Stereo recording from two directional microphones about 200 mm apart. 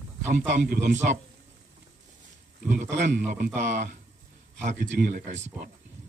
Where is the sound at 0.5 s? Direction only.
40° right (ahead or behind).